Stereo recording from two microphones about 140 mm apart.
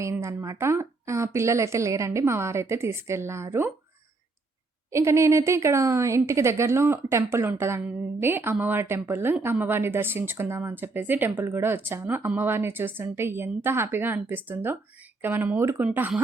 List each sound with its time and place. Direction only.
0.0 s a woman's voice: 20° right (ahead or behind)
4.9 s speech: 20° right (ahead or behind)